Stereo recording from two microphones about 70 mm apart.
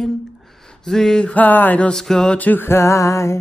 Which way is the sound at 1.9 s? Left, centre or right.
Centre.